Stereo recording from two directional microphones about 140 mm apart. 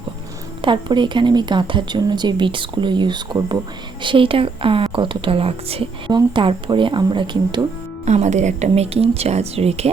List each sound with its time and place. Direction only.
0.6 s a woman's voice: 35° right (ahead or behind)
8.0 s speech: 55° right (ahead or behind)